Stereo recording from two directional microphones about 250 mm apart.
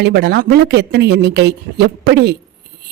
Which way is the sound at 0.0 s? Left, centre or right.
Right.